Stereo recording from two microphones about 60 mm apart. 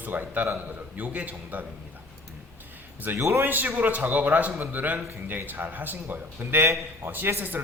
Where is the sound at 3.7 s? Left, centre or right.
Right.